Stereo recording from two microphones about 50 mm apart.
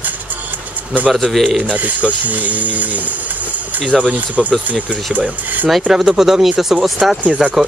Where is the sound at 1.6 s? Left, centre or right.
Right.